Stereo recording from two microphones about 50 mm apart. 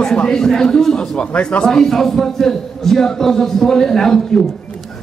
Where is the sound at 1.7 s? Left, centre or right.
Centre.